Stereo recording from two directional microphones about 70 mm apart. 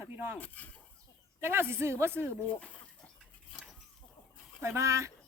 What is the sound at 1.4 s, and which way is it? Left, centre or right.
Speech, right.